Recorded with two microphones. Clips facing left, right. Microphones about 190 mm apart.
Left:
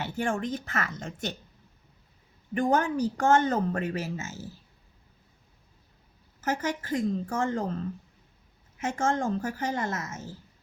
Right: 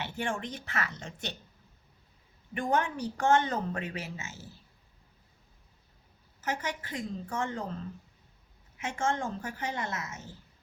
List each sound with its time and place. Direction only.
0.0 s speech: 40° left (ahead or behind)
2.6 s speech: 40° left (ahead or behind)
6.4 s speech: 45° left (ahead or behind)
8.8 s speech: 45° left (ahead or behind)